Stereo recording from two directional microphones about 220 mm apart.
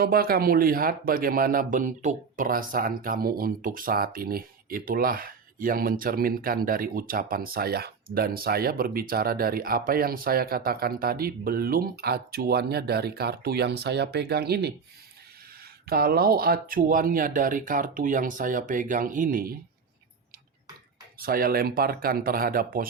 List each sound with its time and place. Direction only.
0.0 s speech: 40° right (ahead or behind)
15.9 s speech: 45° right (ahead or behind)
21.2 s speech: 40° right (ahead or behind)